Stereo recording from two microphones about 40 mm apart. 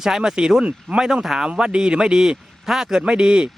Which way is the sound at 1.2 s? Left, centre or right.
Centre.